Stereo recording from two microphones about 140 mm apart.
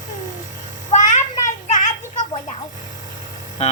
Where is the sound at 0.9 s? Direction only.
65° left (ahead or behind).